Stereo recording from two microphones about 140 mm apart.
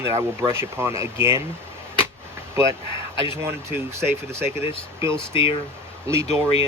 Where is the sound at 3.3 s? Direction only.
15° right (ahead or behind).